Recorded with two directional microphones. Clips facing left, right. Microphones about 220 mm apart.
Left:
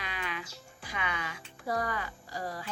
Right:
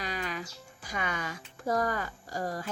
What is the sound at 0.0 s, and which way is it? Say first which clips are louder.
Music: right 4 dB; 40° right (ahead or behind).